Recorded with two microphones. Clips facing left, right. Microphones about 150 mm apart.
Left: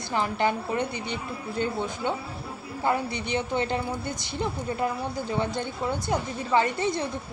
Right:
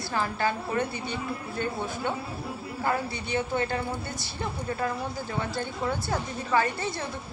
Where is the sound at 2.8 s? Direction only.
20° left (ahead or behind).